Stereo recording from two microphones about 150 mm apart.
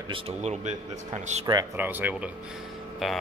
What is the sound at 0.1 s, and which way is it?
Speech, 45° right (ahead or behind).